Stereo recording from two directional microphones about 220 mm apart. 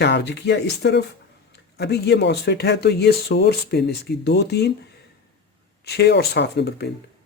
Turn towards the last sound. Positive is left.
turn(degrees=50)  # may be behind; listen again after turning